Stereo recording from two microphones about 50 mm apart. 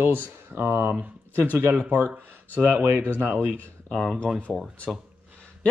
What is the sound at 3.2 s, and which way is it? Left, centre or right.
Speech, right.